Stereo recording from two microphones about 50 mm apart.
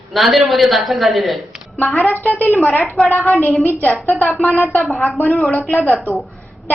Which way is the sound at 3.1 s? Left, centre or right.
Left.